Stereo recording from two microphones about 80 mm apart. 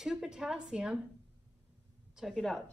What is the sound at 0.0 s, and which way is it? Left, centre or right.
Speech, centre.